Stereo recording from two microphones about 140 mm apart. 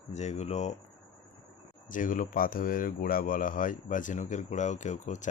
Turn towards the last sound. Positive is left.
turn(degrees=60)  # may be behind; listen again after turning